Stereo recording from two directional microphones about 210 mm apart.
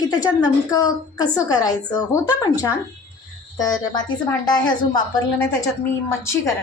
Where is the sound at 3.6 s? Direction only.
15° left (ahead or behind).